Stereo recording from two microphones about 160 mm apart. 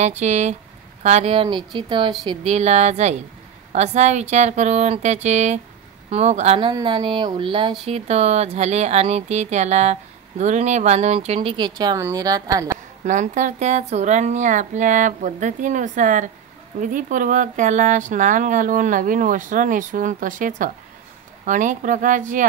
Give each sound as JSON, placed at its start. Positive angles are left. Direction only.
{"t": 0.2, "sound": "speech", "side_deg": -45}
{"t": 2.2, "sound": "speech", "side_deg": -40}
{"t": 6.7, "sound": "speech", "side_deg": -30}
{"t": 13.0, "sound": "speech", "side_deg": -50}